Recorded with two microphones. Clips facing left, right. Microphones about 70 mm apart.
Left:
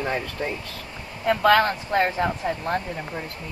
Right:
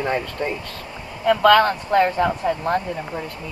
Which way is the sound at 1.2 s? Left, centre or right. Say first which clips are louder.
Right 4 dB; centre.